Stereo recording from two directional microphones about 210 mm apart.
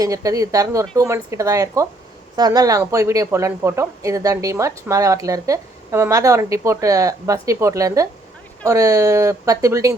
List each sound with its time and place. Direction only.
0.0 s a woman's voice: 15° right (ahead or behind)